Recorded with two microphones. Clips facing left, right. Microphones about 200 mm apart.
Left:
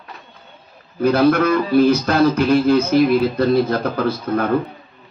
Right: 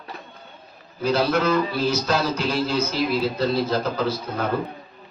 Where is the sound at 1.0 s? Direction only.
55° left (ahead or behind).